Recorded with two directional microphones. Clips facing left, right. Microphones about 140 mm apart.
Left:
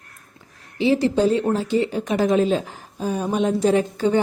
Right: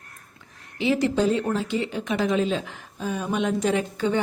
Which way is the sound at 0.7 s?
30° left (ahead or behind).